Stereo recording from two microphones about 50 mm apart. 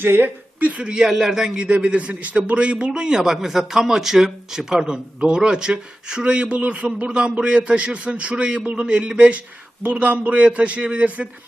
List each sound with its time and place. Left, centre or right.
0.0 s a woman's voice: right
0.6 s a man's voice: right; by 1.5 s centre
1.5 s a man's voice: right